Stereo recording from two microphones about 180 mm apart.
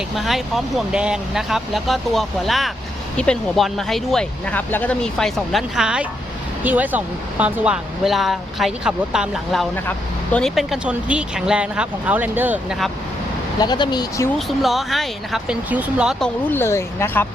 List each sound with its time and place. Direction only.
0.2 s speech: centre (ahead or behind)
13.6 s speech: 25° left (ahead or behind)
14.3 s speech: centre (ahead or behind)
16.5 s speech: 15° left (ahead or behind)